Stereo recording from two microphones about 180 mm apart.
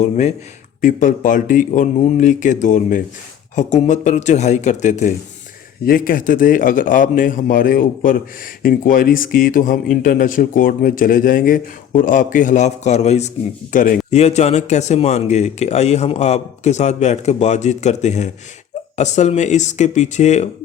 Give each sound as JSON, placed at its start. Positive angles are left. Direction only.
{"t": 0.0, "sound": "speech", "side_deg": 35}
{"t": 5.8, "sound": "speech", "side_deg": 55}